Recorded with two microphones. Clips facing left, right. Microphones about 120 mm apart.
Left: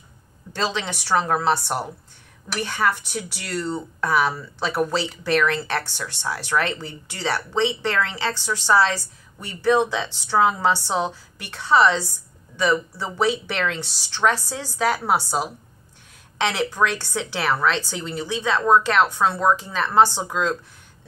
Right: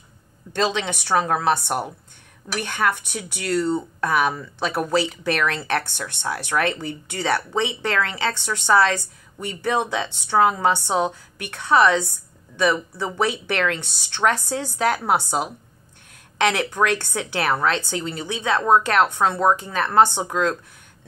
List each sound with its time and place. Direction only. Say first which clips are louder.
0.5 s a woman's voice: right 3 dB; 55° right (ahead or behind)